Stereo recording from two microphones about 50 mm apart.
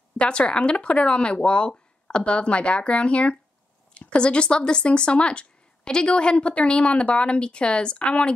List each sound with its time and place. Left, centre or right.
0.2 s speech: centre